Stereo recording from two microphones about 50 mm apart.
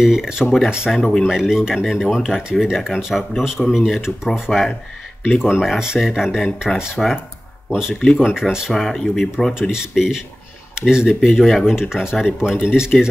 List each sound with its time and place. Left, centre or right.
0.0 s speech: centre
0.9 s speech: centre
4.3 s speech: centre
5.3 s speech: centre
8.2 s speech: centre
8.7 s speech: centre
9.5 s speech: centre